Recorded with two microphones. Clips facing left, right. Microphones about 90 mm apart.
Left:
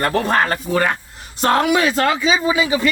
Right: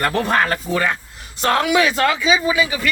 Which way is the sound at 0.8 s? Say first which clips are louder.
Left 2 dB; 45° left (ahead or behind).